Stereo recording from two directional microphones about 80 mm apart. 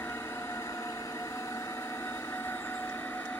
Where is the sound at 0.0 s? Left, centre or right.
Left.